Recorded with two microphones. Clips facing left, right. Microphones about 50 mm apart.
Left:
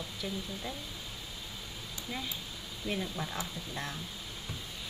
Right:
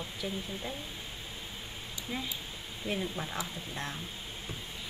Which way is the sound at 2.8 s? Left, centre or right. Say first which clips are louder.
Right 1 dB; centre.